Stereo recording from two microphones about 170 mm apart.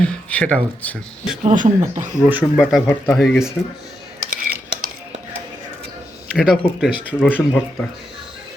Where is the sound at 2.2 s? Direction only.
5° right (ahead or behind).